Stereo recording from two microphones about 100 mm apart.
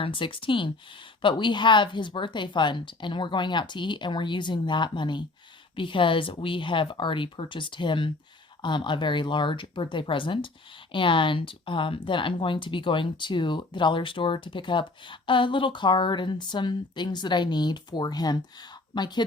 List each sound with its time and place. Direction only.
0.0 s speech: 60° left (ahead or behind)